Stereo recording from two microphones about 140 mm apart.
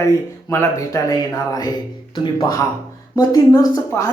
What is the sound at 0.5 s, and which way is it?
A woman's voice, 20° left (ahead or behind).